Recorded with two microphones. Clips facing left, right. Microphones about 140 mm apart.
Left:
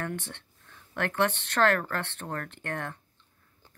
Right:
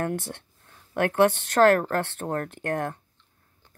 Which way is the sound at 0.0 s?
40° right (ahead or behind).